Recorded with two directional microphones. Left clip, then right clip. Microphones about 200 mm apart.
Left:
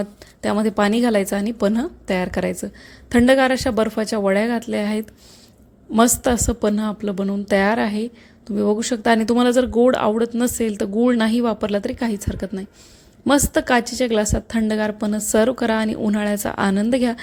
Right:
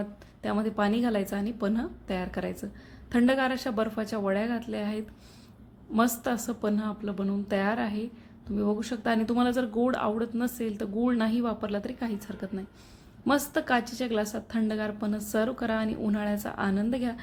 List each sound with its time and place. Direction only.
0.0 s a woman's voice: 40° left (ahead or behind)